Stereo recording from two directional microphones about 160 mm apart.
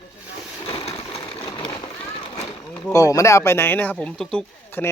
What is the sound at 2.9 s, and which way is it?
Speech, 20° left (ahead or behind).